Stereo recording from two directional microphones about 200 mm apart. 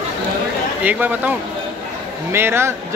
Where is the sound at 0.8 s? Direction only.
10° right (ahead or behind).